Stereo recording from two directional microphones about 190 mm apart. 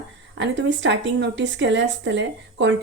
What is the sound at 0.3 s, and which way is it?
Speech, 70° right (ahead or behind).